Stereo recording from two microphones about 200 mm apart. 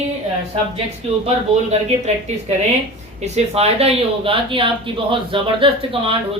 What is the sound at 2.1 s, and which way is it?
Speech, 35° right (ahead or behind).